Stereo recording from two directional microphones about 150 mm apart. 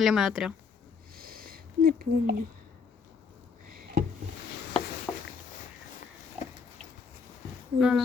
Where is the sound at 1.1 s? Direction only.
80° right.